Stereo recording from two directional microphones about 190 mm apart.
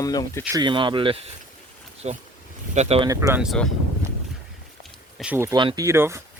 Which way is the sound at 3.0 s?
15° right (ahead or behind).